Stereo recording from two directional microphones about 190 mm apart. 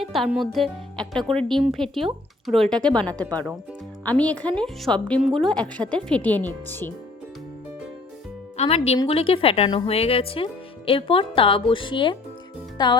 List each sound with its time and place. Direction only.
0.0 s a woman's voice: centre (ahead or behind)
8.5 s speech: 30° left (ahead or behind)